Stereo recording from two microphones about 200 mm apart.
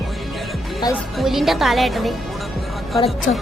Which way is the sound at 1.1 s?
Centre (ahead or behind).